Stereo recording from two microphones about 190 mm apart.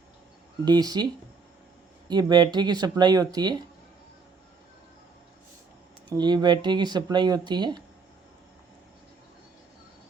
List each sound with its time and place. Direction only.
0.6 s speech: 20° right (ahead or behind)
2.0 s speech: 20° right (ahead or behind)
6.1 s speech: 25° right (ahead or behind)